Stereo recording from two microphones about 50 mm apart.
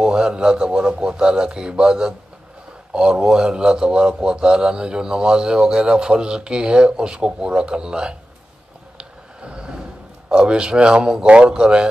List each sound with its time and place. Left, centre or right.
0.0 s a man's voice: centre
8.9 s a sound: centre
10.3 s a man's voice: centre
11.2 s a man's voice: right
11.5 s a man's voice: centre